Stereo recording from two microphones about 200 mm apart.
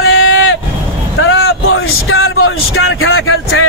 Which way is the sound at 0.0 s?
90° left.